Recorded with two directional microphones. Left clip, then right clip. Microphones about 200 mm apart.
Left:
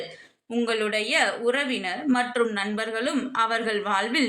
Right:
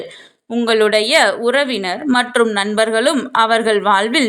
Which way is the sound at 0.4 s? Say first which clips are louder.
Right 11 dB; 35° right (ahead or behind).